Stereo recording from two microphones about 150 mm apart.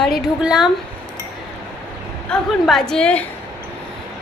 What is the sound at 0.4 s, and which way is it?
Speech, 5° right (ahead or behind).